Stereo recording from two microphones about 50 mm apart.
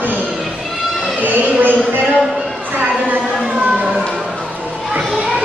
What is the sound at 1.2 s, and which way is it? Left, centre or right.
Speech, right.